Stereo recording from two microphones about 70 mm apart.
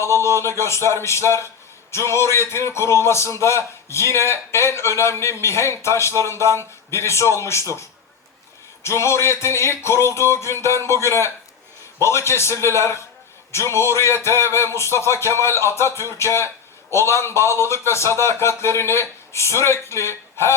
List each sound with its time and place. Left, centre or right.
0.3 s a man's voice: left